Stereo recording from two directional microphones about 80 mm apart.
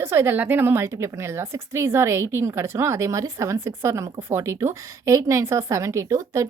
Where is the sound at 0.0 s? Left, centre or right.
Right.